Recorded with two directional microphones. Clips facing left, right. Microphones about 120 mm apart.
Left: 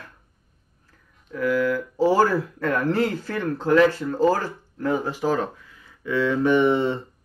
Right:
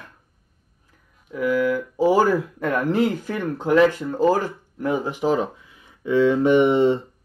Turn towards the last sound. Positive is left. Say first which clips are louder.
# right 3 dB
turn(degrees=-20)  # may be behind; listen again after turning